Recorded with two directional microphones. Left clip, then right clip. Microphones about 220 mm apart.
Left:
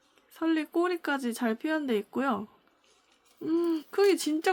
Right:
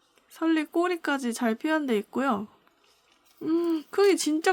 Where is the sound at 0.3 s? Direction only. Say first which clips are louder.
Right 3 dB; 15° right (ahead or behind).